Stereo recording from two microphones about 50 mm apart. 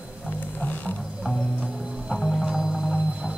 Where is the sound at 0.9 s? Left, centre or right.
Centre.